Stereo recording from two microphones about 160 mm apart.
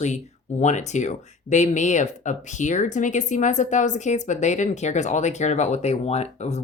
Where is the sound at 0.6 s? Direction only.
45° left (ahead or behind).